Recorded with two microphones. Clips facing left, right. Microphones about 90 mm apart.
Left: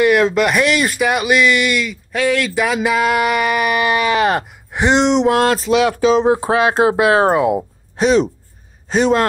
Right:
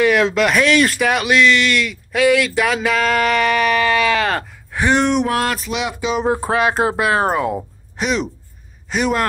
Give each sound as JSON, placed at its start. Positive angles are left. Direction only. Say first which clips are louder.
{"t": 0.0, "sound": "speech", "louder": "left 2 dB", "side_deg": 5}
{"t": 6.2, "sound": "speech", "louder": "left 3 dB", "side_deg": 20}
{"t": 8.0, "sound": "speech", "louder": "left 7 dB", "side_deg": 35}